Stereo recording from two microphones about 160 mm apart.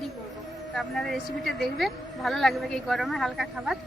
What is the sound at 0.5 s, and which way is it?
A woman's voice, centre (ahead or behind).